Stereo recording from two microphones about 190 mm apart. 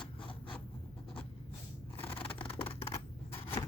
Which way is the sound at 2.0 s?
30° left (ahead or behind).